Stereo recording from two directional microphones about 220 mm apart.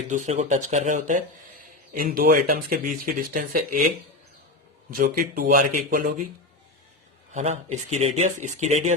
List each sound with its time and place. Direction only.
0.1 s speech: 30° right (ahead or behind)
4.9 s speech: 40° right (ahead or behind)
7.3 s speech: 30° right (ahead or behind)